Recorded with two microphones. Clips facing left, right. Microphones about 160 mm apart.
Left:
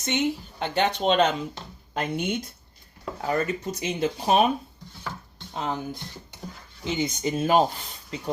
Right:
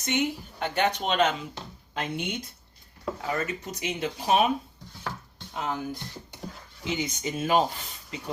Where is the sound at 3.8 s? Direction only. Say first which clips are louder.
Left 3 dB; 30° left (ahead or behind).